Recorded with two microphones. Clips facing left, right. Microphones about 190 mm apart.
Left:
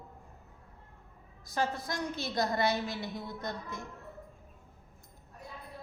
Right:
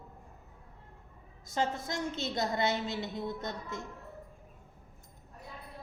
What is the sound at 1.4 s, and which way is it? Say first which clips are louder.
A woman's voice: even; 25° right (ahead or behind).